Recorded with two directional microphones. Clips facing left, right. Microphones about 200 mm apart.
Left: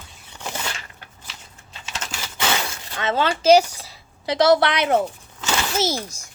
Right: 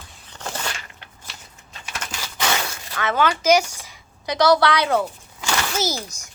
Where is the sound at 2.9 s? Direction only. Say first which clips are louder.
Right 1 dB; 25° left (ahead or behind).